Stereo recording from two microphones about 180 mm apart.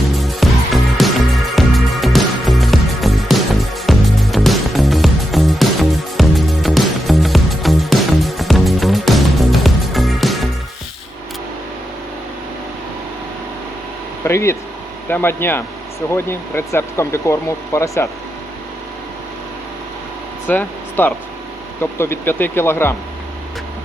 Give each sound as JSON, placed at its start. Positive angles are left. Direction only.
{"t": 0.2, "sound": "music", "side_deg": 0}
{"t": 14.3, "sound": "a sound", "side_deg": 15}
{"t": 15.1, "sound": "speech", "side_deg": 10}
{"t": 20.5, "sound": "speech", "side_deg": 10}